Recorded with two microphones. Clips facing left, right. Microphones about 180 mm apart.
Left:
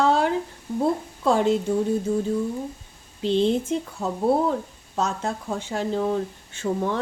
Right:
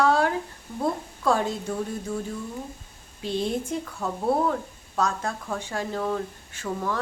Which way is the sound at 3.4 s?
25° left (ahead or behind).